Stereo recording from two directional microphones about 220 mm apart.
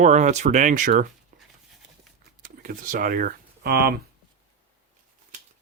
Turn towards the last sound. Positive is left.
turn(degrees=-45)  # may be behind; listen again after turning